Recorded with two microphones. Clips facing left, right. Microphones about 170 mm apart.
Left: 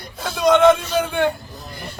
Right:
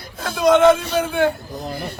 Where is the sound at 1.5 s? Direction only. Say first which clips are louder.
Right 7 dB; 60° right (ahead or behind).